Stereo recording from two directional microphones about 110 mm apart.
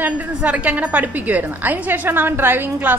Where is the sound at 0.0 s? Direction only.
15° right (ahead or behind).